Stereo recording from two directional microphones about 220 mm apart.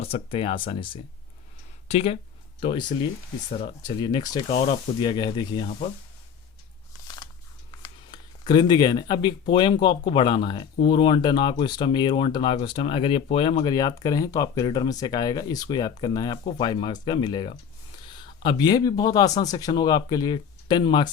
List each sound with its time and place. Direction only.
0.0 s speech: 25° left (ahead or behind)
7.8 s speech: 20° left (ahead or behind)